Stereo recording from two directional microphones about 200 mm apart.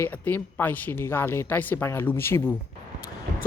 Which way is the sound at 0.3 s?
10° left (ahead or behind).